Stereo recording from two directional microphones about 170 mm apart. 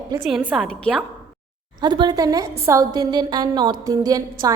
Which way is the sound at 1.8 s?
25° right (ahead or behind).